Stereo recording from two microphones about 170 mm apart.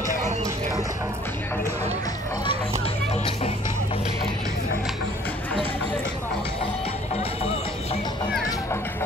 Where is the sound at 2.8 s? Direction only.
35° left (ahead or behind).